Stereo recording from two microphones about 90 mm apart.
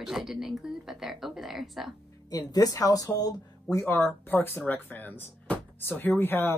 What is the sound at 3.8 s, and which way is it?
Speech, 25° left (ahead or behind).